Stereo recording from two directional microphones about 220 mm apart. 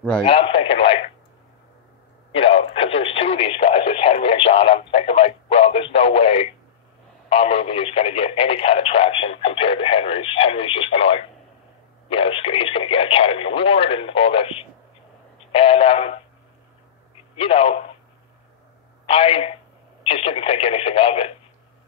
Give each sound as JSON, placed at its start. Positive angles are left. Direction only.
{"t": 0.2, "sound": "speech", "side_deg": 25}
{"t": 2.3, "sound": "speech", "side_deg": 25}
{"t": 17.4, "sound": "a man's voice", "side_deg": 25}
{"t": 19.0, "sound": "speech", "side_deg": 25}